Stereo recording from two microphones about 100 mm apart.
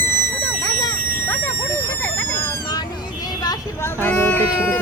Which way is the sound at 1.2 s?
20° left (ahead or behind).